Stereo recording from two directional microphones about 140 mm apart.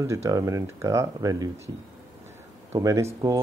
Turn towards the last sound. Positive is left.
turn(degrees=-25)  # may be behind; listen again after turning